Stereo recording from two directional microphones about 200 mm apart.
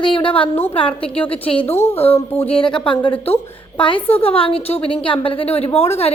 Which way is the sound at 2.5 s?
25° left (ahead or behind).